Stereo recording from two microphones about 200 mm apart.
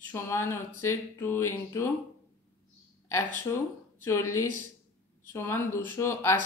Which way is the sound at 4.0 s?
15° left (ahead or behind).